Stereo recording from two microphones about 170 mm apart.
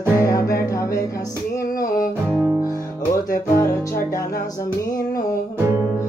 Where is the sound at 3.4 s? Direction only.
15° left (ahead or behind).